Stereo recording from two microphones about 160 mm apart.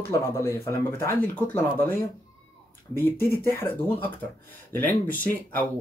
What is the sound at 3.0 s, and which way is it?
Speech, 15° left (ahead or behind).